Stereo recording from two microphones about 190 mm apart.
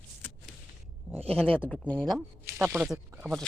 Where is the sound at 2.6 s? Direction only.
10° right (ahead or behind).